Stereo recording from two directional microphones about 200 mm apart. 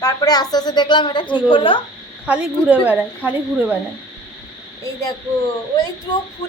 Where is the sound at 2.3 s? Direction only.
5° right (ahead or behind).